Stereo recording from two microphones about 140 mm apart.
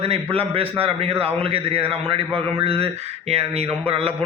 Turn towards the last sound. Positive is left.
turn(degrees=-45)  # may be behind; listen again after turning